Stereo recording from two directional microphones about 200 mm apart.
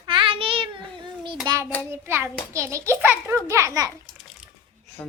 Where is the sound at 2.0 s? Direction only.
10° right (ahead or behind).